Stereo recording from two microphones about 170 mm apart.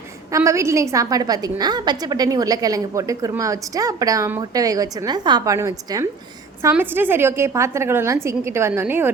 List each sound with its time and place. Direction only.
0.3 s a woman's voice: 20° right (ahead or behind)